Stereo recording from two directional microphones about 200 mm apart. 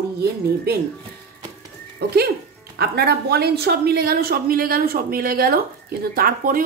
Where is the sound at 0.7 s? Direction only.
55° right (ahead or behind).